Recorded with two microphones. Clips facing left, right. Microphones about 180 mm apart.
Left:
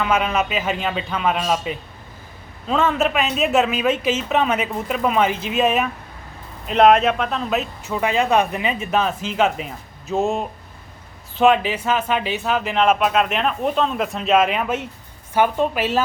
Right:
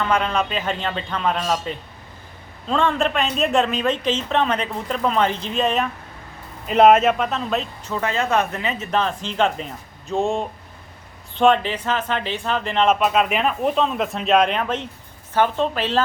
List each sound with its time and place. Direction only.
0.0 s a woman's voice: 10° left (ahead or behind)
6.7 s a woman's voice: 5° right (ahead or behind)